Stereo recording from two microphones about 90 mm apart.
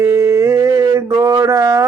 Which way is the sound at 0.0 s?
30° right (ahead or behind).